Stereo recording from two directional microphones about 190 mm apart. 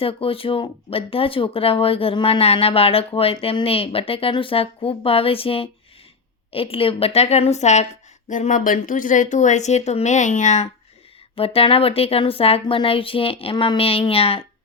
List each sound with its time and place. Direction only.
0.0 s speech: 30° left (ahead or behind)